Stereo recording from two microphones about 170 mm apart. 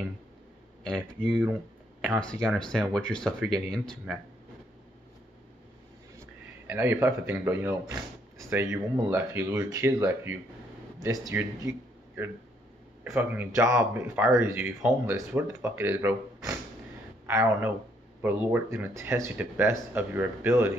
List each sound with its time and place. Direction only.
0.8 s speech: 5° left (ahead or behind)
6.7 s speech: 15° right (ahead or behind)
13.0 s speech: 15° right (ahead or behind)